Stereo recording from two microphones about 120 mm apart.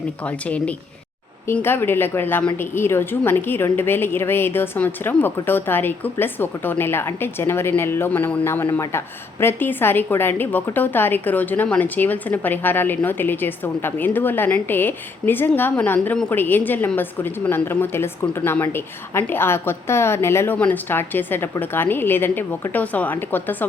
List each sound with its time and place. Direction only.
0.3 s a woman's voice: 10° left (ahead or behind)